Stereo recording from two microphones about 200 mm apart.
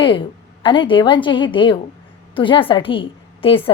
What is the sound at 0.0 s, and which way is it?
A woman's voice, 25° left (ahead or behind).